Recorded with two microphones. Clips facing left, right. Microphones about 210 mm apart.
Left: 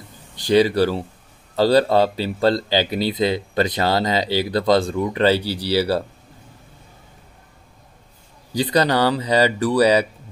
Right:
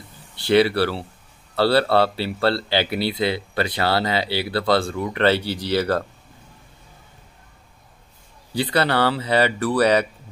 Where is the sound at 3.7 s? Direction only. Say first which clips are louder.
Right 1 dB; 20° left (ahead or behind).